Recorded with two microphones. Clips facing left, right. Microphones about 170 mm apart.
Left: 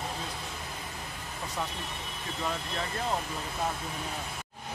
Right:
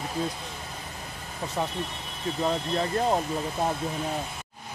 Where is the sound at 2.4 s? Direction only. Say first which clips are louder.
Right 7 dB; 35° right (ahead or behind).